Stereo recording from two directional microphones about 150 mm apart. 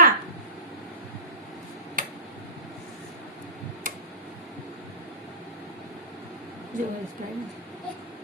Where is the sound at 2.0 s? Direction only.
65° right (ahead or behind).